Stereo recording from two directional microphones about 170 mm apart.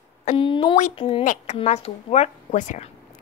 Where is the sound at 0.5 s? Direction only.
30° left (ahead or behind).